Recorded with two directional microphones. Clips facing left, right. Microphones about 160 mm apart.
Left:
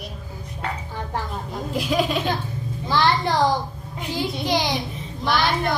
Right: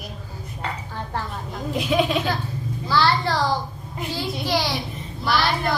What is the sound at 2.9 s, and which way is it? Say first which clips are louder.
Speech: left 1 dB; 20° left (ahead or behind).